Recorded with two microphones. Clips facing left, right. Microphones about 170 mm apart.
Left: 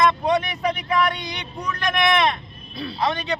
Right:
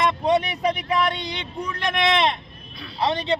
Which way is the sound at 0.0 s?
30° right (ahead or behind).